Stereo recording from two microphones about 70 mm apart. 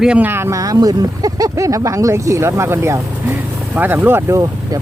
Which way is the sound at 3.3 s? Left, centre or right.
Right.